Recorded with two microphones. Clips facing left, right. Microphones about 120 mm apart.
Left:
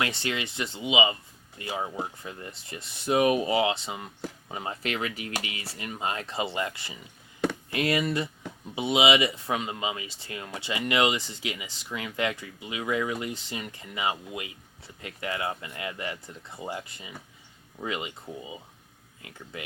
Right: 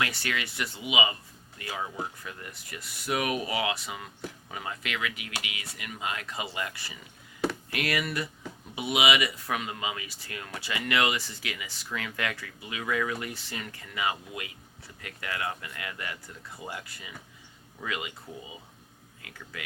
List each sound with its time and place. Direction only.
0.0 s speech: 25° left (ahead or behind)